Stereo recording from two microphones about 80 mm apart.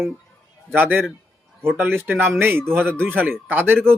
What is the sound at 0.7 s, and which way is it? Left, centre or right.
Speech, right.